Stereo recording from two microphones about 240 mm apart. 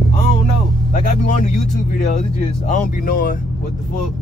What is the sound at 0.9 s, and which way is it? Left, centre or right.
Speech, left.